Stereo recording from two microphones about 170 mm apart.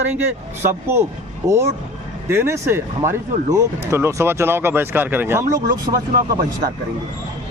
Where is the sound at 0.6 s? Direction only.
15° right (ahead or behind).